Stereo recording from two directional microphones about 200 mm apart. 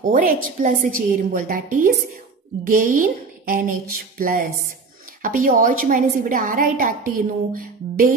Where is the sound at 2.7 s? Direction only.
40° right (ahead or behind).